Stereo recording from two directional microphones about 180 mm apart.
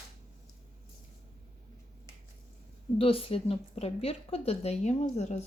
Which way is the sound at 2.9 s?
30° left (ahead or behind).